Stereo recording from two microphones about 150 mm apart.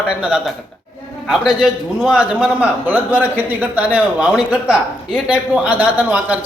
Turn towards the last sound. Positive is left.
turn(degrees=-10)  # may be behind; listen again after turning